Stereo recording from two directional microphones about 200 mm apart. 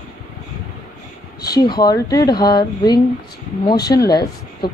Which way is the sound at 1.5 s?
20° left (ahead or behind).